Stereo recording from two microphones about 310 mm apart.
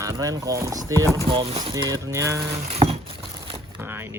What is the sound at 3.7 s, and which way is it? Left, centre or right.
Vehicle, centre.